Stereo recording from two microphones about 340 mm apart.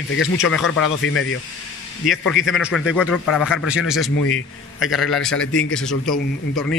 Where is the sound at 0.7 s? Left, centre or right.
Left.